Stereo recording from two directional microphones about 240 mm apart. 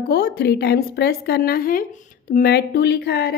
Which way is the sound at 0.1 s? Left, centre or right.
Left.